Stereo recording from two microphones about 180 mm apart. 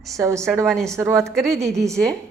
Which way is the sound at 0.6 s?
Centre (ahead or behind).